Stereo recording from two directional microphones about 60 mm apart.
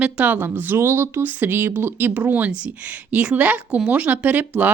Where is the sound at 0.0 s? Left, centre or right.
Right.